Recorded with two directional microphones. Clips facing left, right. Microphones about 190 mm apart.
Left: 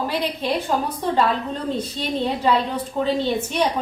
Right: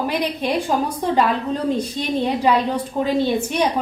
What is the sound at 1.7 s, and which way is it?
A woman's voice, 10° right (ahead or behind).